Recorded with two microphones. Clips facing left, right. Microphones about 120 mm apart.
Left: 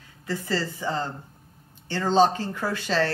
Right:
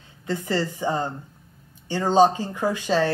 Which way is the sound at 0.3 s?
20° right (ahead or behind).